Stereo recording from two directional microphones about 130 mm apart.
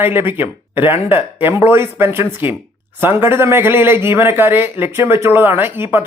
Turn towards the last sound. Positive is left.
turn(degrees=-15)  # may be behind; listen again after turning